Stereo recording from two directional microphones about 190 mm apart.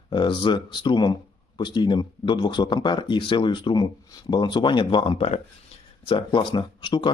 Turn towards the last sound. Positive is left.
turn(degrees=25)  # may be behind; listen again after turning